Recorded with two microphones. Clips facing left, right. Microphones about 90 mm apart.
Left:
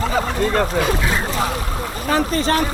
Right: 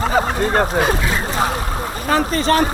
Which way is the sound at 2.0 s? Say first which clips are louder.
Right 2 dB; 40° right (ahead or behind).